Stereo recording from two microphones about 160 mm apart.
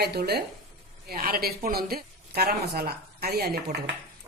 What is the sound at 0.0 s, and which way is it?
Speech, 85° right.